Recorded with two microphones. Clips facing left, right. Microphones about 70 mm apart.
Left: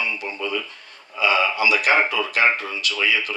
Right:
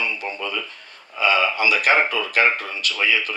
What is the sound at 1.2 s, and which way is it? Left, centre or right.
Speech, right.